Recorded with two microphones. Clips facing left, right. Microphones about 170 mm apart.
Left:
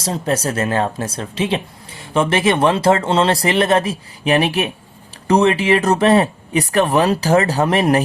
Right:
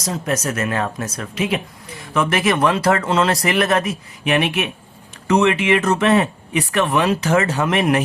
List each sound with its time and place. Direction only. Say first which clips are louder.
0.0 s speech: left 3 dB; 30° left (ahead or behind)